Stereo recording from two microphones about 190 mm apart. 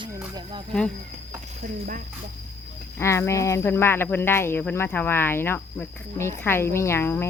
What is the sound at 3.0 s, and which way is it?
Speech, 15° left (ahead or behind).